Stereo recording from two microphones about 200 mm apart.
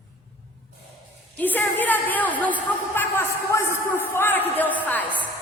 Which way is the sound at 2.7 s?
10° left (ahead or behind).